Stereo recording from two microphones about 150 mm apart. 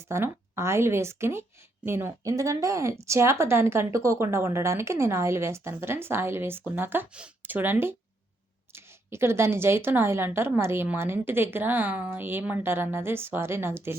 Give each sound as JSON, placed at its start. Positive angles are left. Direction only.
{"t": 0.0, "sound": "a woman's voice", "side_deg": -15}